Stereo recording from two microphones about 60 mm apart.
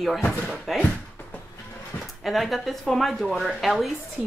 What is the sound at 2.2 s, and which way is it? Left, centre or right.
Speech, centre.